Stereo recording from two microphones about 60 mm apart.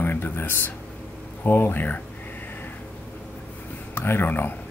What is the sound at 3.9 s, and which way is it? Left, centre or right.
Speech, left.